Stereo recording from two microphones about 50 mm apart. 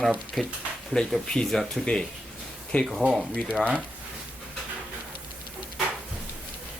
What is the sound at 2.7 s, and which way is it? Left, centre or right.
Speech, left.